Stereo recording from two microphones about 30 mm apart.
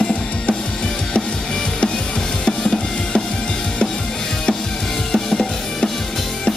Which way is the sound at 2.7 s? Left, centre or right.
Left.